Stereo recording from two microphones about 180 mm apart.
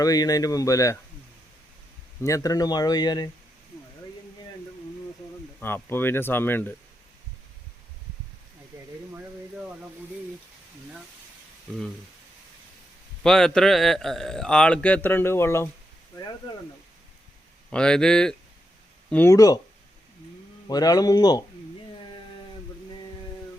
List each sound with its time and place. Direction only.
0.0 s speech: 20° left (ahead or behind)
2.2 s speech: 20° left (ahead or behind)
5.5 s speech: 10° left (ahead or behind)
13.2 s speech: 5° left (ahead or behind)
17.7 s speech: 5° left (ahead or behind)
19.1 s speech: 15° left (ahead or behind)
20.7 s speech: 20° left (ahead or behind)